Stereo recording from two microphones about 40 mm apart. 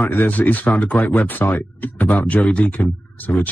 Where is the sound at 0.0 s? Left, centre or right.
Left.